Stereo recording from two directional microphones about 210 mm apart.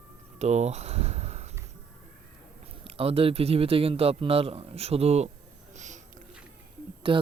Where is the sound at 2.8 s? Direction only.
25° right (ahead or behind).